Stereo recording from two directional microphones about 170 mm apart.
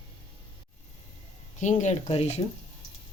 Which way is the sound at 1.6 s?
45° left (ahead or behind).